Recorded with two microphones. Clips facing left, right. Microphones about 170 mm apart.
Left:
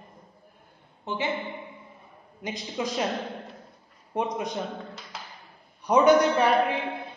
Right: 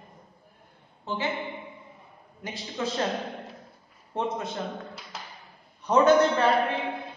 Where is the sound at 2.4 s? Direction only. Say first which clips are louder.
Left 1 dB; 15° left (ahead or behind).